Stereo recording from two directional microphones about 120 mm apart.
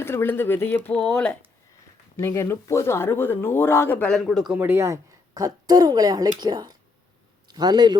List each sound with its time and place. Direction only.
0.0 s speech: 20° left (ahead or behind)
2.1 s speech: 25° left (ahead or behind)
4.1 s speech: centre (ahead or behind)
4.5 s a man's voice: 15° right (ahead or behind); by 7.9 s 35° right (ahead or behind)